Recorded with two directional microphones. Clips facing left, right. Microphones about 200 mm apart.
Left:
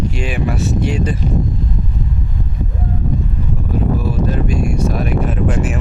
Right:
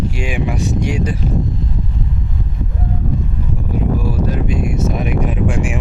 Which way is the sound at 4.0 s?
10° right (ahead or behind).